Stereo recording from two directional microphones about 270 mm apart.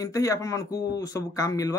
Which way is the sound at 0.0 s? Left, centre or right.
Centre.